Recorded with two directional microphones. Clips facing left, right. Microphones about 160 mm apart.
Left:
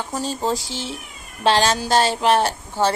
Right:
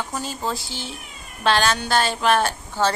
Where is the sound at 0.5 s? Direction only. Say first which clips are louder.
Left 4 dB; 90° left.